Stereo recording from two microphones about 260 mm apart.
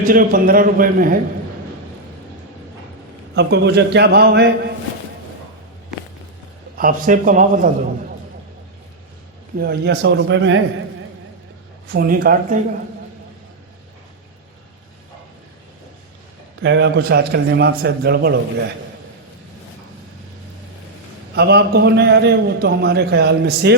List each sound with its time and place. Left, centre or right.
0.0 s a man's voice: right
3.3 s a man's voice: right
6.7 s a man's voice: right
9.6 s speech: right
11.9 s a man's voice: right
16.6 s a man's voice: right
21.3 s a man's voice: right